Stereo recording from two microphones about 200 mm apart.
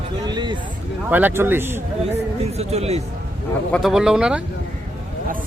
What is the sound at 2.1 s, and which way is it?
Speech, 30° right (ahead or behind).